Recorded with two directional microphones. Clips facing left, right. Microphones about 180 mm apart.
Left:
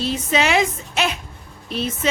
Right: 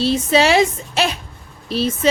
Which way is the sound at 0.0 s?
30° right (ahead or behind).